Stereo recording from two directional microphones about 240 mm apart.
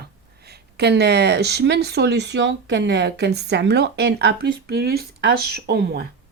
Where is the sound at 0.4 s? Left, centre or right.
Right.